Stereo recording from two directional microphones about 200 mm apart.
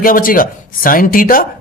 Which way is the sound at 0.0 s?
45° left (ahead or behind).